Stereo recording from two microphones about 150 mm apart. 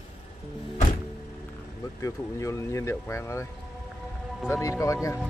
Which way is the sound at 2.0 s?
20° left (ahead or behind).